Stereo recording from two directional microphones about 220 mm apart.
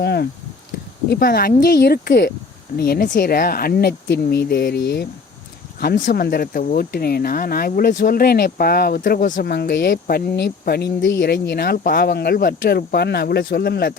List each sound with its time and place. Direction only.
0.0 s speech: 50° left (ahead or behind)